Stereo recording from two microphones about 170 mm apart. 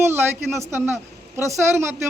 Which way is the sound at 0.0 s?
15° right (ahead or behind).